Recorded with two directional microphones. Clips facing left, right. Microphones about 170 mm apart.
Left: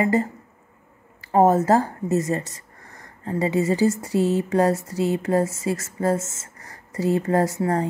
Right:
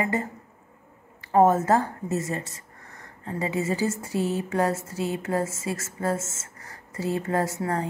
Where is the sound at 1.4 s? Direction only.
35° left (ahead or behind).